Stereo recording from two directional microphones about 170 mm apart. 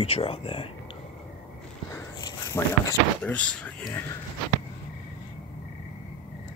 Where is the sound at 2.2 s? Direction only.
25° left (ahead or behind).